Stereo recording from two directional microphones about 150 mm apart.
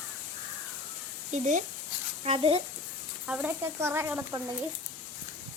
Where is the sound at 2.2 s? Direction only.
40° right (ahead or behind).